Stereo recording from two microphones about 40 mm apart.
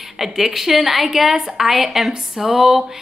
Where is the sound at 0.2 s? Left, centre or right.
Centre.